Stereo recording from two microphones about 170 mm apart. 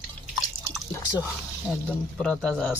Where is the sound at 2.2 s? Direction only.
5° left (ahead or behind).